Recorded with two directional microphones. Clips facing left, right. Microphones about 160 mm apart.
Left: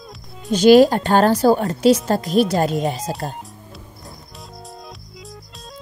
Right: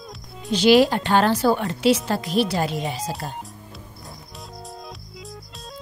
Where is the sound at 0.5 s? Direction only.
45° left (ahead or behind).